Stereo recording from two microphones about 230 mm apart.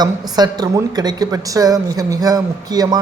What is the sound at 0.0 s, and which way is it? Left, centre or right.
Speech, centre.